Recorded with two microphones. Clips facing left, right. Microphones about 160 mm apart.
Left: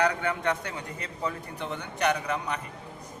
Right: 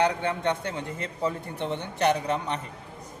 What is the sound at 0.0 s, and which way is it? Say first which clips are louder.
A man's voice: right 2 dB; 30° right (ahead or behind).